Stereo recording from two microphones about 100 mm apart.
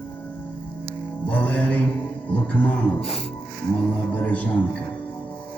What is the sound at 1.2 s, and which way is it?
Speech, 15° left (ahead or behind).